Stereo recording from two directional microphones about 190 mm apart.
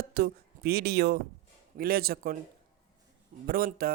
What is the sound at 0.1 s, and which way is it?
Speech, 55° right (ahead or behind).